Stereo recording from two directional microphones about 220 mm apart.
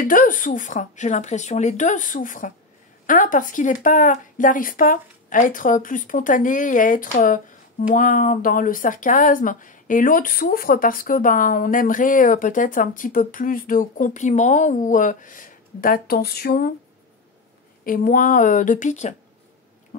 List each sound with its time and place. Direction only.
0.0 s speech: 40° left (ahead or behind)
17.8 s speech: 40° left (ahead or behind)